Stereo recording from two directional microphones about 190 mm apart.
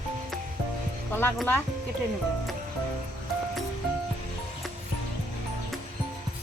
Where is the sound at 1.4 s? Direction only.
10° left (ahead or behind).